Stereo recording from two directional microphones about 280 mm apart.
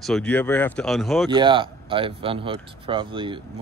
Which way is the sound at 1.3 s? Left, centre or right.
Centre.